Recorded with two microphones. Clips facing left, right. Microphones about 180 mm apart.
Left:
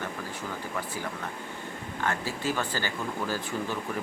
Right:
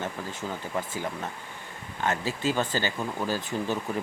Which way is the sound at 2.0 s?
20° right (ahead or behind).